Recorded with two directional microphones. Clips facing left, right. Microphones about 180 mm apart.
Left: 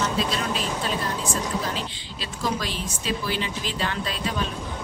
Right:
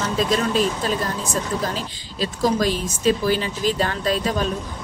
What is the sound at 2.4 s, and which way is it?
Speech, 45° right (ahead or behind).